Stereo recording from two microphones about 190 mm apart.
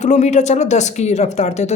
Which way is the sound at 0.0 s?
40° left (ahead or behind).